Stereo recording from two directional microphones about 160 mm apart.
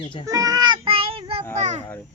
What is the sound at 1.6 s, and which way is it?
Speech, 45° right (ahead or behind).